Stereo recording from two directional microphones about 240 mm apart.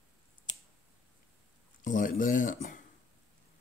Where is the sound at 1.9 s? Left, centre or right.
Left.